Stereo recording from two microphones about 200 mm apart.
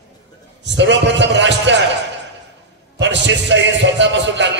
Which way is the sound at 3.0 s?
60° right (ahead or behind).